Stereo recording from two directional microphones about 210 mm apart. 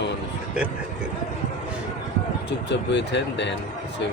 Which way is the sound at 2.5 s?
55° left (ahead or behind).